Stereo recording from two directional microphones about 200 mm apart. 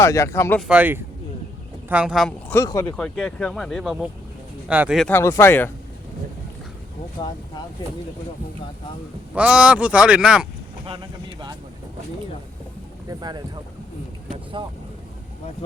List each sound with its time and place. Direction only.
0.0 s speech: 15° left (ahead or behind)
0.7 s speech: 10° right (ahead or behind)
2.6 s speech: 15° left (ahead or behind)
2.9 s speech: 5° left (ahead or behind)
5.0 s speech: 10° left (ahead or behind)
9.3 s speech: 5° right (ahead or behind)
10.8 s speech: 25° right (ahead or behind)
13.1 s speech: 20° right (ahead or behind)
14.6 s speech: 25° right (ahead or behind)